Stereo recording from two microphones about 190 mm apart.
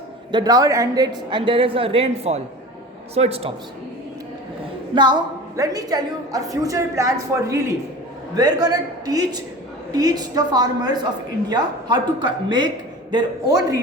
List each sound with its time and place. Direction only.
0.3 s a woman's voice: 20° right (ahead or behind)
4.9 s a woman's voice: 25° right (ahead or behind)